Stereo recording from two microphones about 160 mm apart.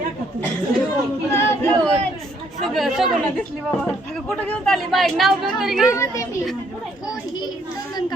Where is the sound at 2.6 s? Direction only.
Centre (ahead or behind).